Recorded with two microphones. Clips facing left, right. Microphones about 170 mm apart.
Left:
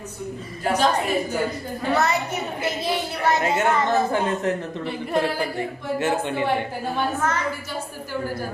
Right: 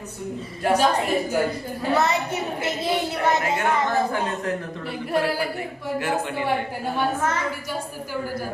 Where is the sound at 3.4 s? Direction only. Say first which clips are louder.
Left 2 dB; 25° left (ahead or behind).